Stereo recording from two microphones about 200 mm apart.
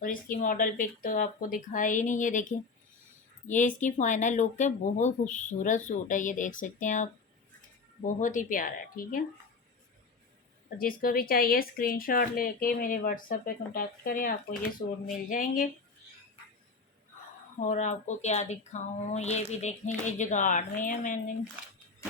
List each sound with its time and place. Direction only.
0.0 s speech: 45° left (ahead or behind)
10.8 s speech: 45° left (ahead or behind)
17.6 s speech: 40° left (ahead or behind)